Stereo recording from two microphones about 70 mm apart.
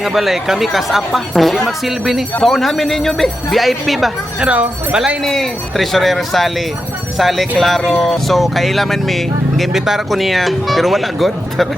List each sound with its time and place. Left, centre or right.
0.0 s speech: centre
4.4 s speech: centre
5.2 s speech: centre